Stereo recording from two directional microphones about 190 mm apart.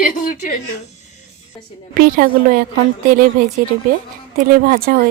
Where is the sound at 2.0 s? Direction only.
50° right (ahead or behind).